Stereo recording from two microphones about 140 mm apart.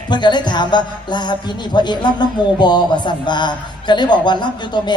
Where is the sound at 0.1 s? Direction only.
30° left (ahead or behind).